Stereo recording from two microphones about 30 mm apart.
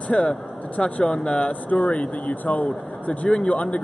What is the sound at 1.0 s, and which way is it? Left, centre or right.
Speech, left.